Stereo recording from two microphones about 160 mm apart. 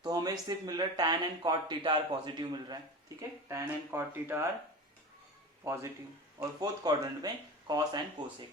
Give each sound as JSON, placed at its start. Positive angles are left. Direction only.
{"t": 0.0, "sound": "a sound", "side_deg": -25}
{"t": 0.4, "sound": "speech", "side_deg": -25}
{"t": 3.2, "sound": "speech", "side_deg": -15}
{"t": 5.6, "sound": "speech", "side_deg": -15}